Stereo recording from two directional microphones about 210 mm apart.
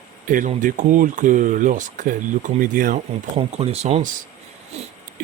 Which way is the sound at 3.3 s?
30° right (ahead or behind).